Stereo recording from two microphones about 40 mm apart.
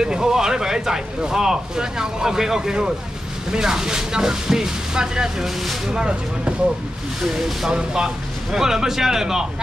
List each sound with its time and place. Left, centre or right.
0.0 s speech: centre
7.2 s speech: centre